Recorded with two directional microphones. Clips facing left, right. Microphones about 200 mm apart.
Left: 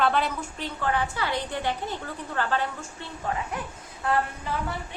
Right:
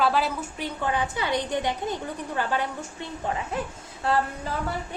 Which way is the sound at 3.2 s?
25° right (ahead or behind).